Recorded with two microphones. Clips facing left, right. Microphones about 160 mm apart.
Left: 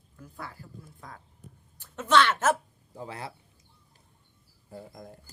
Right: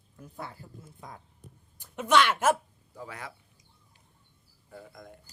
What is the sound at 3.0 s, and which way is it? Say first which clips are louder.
Speech: left 3 dB; 30° left (ahead or behind).